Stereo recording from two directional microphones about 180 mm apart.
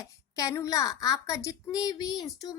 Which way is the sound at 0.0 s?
20° left (ahead or behind).